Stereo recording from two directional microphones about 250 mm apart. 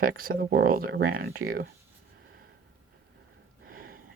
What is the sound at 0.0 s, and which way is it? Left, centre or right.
Speech, right.